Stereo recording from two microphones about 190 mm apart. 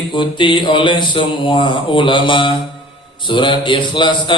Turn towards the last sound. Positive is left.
turn(degrees=25)  # may be behind; listen again after turning